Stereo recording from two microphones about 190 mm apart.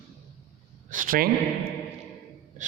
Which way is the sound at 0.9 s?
45° right (ahead or behind).